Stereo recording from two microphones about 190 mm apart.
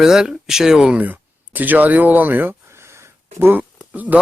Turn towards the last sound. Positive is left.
turn(degrees=-10)  # may be behind; listen again after turning